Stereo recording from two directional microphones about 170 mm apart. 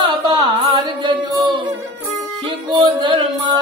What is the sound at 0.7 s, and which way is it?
Chant, 30° right (ahead or behind).